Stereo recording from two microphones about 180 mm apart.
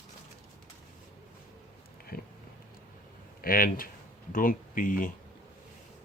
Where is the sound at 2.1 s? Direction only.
55° left (ahead or behind).